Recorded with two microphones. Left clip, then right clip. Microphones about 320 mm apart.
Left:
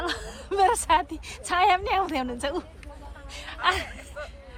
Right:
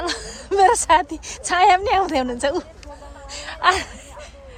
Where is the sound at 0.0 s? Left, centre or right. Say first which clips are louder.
Right 5 dB; centre.